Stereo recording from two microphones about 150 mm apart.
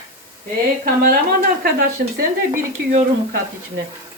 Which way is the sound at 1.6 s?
85° right.